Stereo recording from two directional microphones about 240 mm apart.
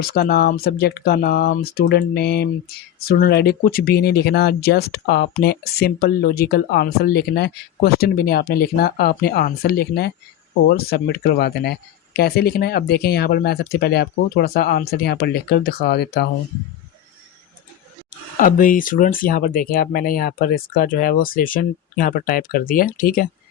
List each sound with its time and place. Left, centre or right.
0.0 s speech: left
18.3 s speech: left